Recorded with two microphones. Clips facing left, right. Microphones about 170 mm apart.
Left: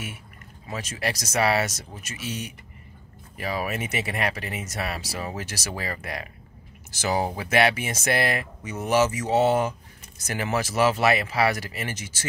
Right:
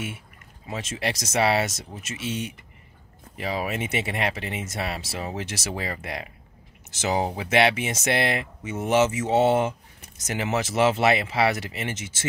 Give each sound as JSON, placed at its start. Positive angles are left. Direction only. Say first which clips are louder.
{"t": 0.7, "sound": "speech", "louder": "right 1 dB", "side_deg": -25}